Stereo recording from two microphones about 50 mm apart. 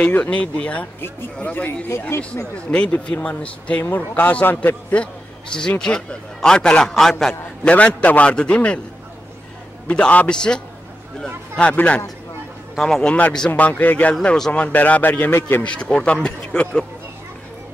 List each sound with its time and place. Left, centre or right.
0.0 s a man's voice: left
1.9 s speech: left
2.7 s a man's voice: left
4.9 s a man's voice: centre
7.6 s a man's voice: left
9.8 s a man's voice: left
11.7 s a man's voice: left
12.7 s a man's voice: centre
13.0 s a man's voice: left
14.2 s a man's voice: centre
14.7 s a man's voice: left
15.6 s a man's voice: left